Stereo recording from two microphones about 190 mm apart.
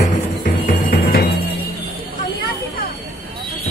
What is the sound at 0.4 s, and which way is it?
Music, 45° left (ahead or behind).